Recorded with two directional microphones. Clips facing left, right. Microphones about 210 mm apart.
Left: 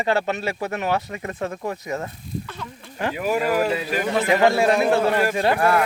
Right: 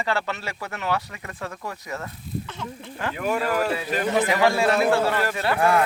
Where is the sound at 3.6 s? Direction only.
20° left (ahead or behind).